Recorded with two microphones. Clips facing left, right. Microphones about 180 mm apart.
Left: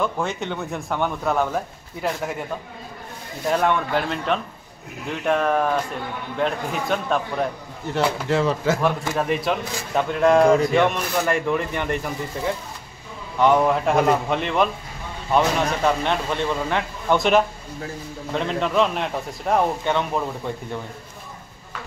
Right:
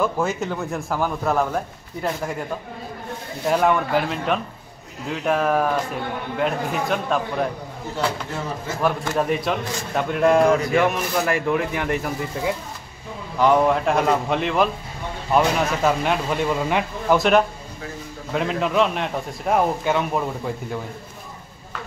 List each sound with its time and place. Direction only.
0.0 s a man's voice: 5° right (ahead or behind)
3.4 s a man's voice: 5° right (ahead or behind)
7.9 s speech: 85° left
8.8 s a man's voice: centre (ahead or behind)